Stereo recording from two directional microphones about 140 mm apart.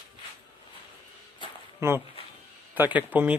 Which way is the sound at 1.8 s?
20° right (ahead or behind).